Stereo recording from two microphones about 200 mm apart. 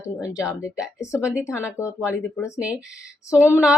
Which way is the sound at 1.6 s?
15° left (ahead or behind).